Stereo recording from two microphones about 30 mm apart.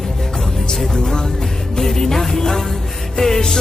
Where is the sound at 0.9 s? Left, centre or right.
Left.